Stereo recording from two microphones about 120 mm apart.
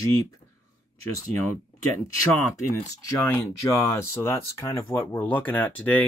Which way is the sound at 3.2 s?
20° left (ahead or behind).